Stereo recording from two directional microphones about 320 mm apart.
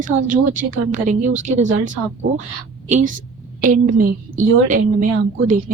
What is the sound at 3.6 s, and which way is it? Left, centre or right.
A woman's voice, right.